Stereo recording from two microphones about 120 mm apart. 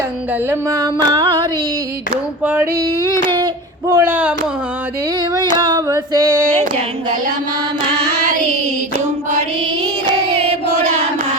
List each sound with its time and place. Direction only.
1.0 s a sound: 35° right (ahead or behind)
2.4 s speech: 15° right (ahead or behind)
2.7 s child singing: 35° right (ahead or behind)
3.8 s speech: 20° right (ahead or behind)
5.5 s female singing: 35° right (ahead or behind)